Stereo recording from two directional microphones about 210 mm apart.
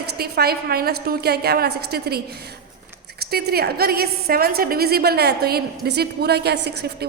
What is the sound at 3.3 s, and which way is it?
A woman's voice, 45° right (ahead or behind).